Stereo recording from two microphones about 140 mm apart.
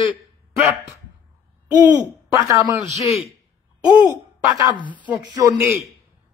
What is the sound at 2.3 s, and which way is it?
Speech, 25° right (ahead or behind).